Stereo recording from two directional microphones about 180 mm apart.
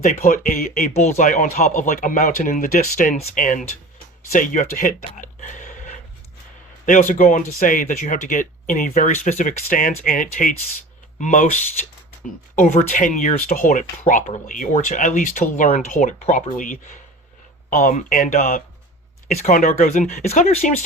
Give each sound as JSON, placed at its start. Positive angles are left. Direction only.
{"t": 0.0, "sound": "speech", "side_deg": 45}
{"t": 7.1, "sound": "speech", "side_deg": 45}